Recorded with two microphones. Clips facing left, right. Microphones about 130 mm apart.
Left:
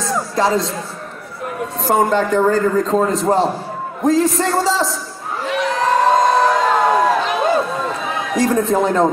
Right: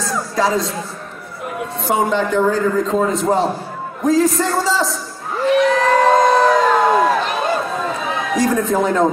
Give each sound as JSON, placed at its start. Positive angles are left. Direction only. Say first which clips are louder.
{"t": 0.0, "sound": "music", "louder": "left 1 dB", "side_deg": 25}
{"t": 0.5, "sound": "a man's voice", "louder": "left 1 dB", "side_deg": 0}
{"t": 1.8, "sound": "a man's voice", "louder": "left 2 dB", "side_deg": 0}
{"t": 5.6, "sound": "crowd", "louder": "right 1 dB", "side_deg": 0}
{"t": 8.4, "sound": "a man's voice", "louder": "left 2 dB", "side_deg": 0}